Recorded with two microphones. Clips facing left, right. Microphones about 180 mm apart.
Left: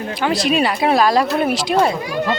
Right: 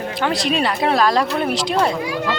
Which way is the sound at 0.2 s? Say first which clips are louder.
Left 3 dB; 5° left (ahead or behind).